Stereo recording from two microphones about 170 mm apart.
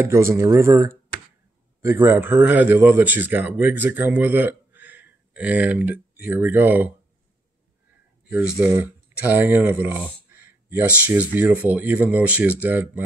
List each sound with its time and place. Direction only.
0.0 s a man's voice: 15° right (ahead or behind)
8.3 s speech: 10° right (ahead or behind)